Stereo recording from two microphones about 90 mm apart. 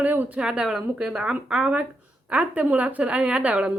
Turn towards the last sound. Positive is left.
turn(degrees=-10)  # may be behind; listen again after turning